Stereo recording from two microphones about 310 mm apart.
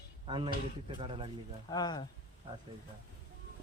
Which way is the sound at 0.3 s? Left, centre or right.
Centre.